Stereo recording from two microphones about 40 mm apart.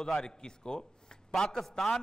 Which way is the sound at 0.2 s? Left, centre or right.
Centre.